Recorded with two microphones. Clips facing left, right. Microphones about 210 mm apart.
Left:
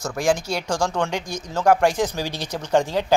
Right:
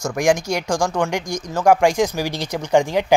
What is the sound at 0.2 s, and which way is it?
Speech, 15° right (ahead or behind).